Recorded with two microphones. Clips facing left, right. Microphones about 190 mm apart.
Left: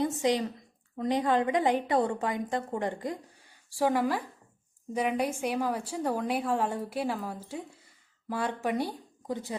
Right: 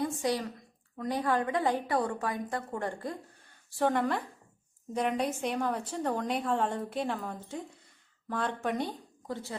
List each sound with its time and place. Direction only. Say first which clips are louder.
0.0 s a woman's voice: left 4 dB; 20° left (ahead or behind)
3.8 s a woman's voice: left 1 dB; 5° left (ahead or behind)